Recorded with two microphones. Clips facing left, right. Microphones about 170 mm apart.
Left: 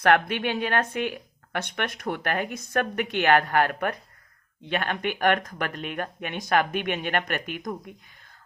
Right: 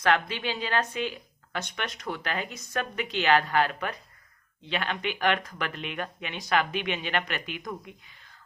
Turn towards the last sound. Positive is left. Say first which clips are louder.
# left 4 dB
turn(degrees=45)  # may be behind; listen again after turning